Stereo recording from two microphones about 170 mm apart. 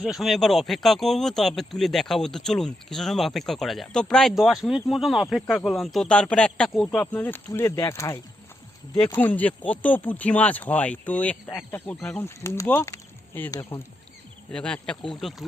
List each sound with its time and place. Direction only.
0.0 s speech: centre (ahead or behind); by 13.8 s 15° left (ahead or behind)
14.5 s speech: 5° left (ahead or behind)